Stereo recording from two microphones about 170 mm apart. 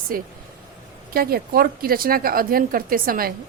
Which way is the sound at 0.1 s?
55° right (ahead or behind).